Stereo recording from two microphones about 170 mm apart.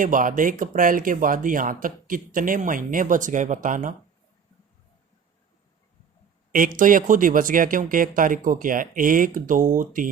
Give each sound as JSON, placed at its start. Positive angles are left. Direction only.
{"t": 0.0, "sound": "speech", "side_deg": -50}
{"t": 6.5, "sound": "speech", "side_deg": -55}